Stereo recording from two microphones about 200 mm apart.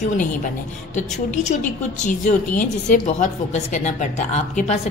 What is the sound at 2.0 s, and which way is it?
A woman's voice, 40° left (ahead or behind).